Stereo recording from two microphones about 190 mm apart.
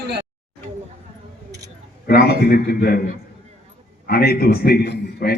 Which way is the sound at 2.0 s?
55° left (ahead or behind).